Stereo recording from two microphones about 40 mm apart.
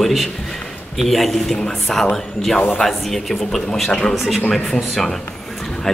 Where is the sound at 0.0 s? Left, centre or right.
Centre.